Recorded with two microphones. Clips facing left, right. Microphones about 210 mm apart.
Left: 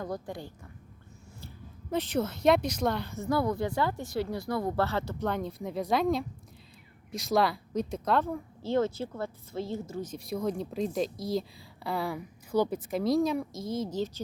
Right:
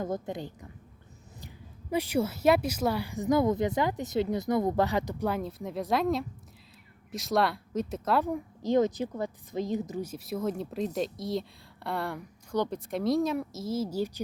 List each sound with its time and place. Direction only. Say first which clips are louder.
0.0 s a woman's voice: right 3 dB; 20° right (ahead or behind); by 8.2 s 5° right (ahead or behind)
8.2 s a woman's voice: right 3 dB; 15° right (ahead or behind)